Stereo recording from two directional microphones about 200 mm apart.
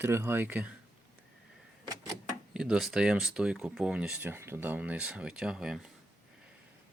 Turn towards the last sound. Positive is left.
turn(degrees=-5)  # may be behind; listen again after turning